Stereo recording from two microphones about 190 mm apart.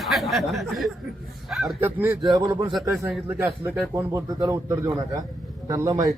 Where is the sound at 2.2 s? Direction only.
20° right (ahead or behind).